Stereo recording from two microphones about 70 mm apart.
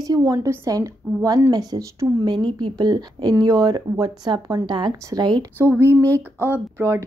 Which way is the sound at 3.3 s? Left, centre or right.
Right.